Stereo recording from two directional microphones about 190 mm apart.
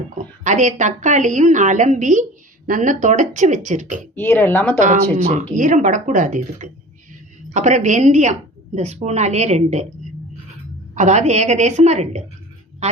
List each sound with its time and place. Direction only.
0.4 s a woman's voice: 40° right (ahead or behind)
4.1 s speech: 10° left (ahead or behind)
5.1 s a woman's voice: 40° right (ahead or behind)
10.9 s a woman's voice: 40° right (ahead or behind)